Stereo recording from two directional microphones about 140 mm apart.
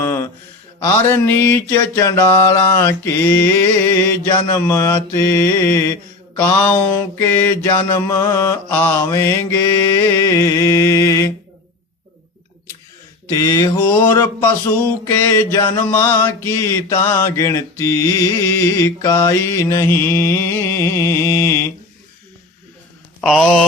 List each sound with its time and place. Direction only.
0.0 s a sound: 20° left (ahead or behind)
0.8 s mantra: 15° left (ahead or behind)
13.2 s mantra: 25° left (ahead or behind)
23.3 s speech: 5° left (ahead or behind)